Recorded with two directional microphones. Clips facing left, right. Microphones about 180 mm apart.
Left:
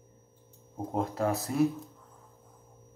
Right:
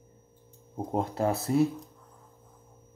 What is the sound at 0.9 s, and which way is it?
Speech, 35° right (ahead or behind).